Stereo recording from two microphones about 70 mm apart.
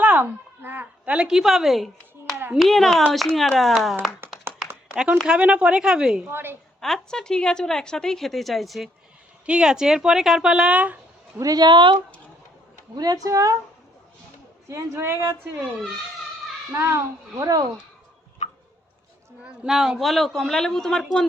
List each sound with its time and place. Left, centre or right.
0.0 s a sound: right
1.0 s a woman's voice: centre
5.2 s a woman's voice: centre
6.2 s a woman's voice: right
6.7 s a woman's voice: centre
9.5 s a woman's voice: centre
11.3 s speech: right
13.0 s speech: right
14.7 s speech: right
16.7 s a woman's voice: right
17.3 s speech: right
19.6 s a man's voice: centre